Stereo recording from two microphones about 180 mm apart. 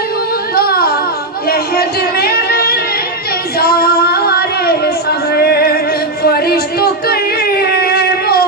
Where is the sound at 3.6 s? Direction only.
55° left (ahead or behind).